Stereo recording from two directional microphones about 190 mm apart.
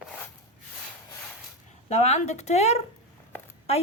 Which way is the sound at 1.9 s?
35° left (ahead or behind).